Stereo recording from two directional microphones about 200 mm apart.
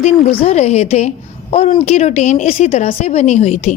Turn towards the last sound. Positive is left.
turn(degrees=30)  # may be behind; listen again after turning